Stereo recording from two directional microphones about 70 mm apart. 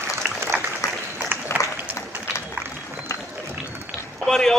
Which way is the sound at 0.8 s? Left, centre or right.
Left.